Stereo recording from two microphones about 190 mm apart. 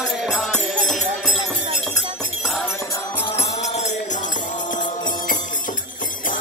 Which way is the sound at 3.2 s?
30° left (ahead or behind).